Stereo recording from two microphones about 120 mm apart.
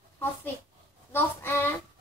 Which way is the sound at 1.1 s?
20° left (ahead or behind).